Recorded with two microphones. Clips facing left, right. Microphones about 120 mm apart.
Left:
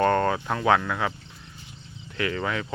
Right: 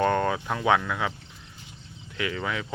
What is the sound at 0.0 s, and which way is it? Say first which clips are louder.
Speech: left 2 dB; 5° right (ahead or behind).